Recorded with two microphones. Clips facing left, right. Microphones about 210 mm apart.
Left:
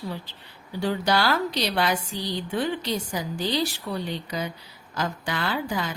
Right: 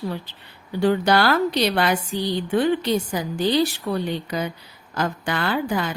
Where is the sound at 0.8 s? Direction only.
60° right (ahead or behind).